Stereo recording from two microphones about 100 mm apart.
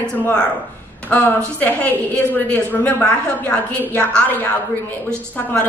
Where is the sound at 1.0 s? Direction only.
15° left (ahead or behind).